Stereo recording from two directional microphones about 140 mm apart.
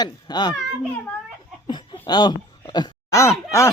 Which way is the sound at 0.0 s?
30° left (ahead or behind).